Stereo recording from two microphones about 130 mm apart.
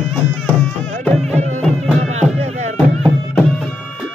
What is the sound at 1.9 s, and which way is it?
Music, 60° right (ahead or behind).